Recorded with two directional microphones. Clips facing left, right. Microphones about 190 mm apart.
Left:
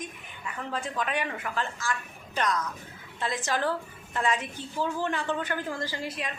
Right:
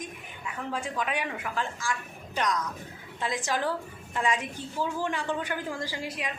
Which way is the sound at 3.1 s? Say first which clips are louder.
Even; 15° right (ahead or behind).